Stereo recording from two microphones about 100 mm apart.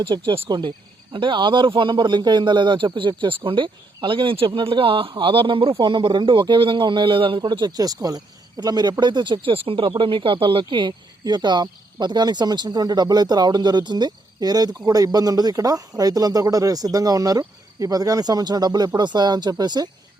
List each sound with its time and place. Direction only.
0.0 s speech: 55° right (ahead or behind)